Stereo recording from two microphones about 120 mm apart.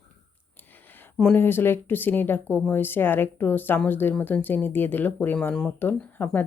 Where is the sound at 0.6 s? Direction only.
15° left (ahead or behind).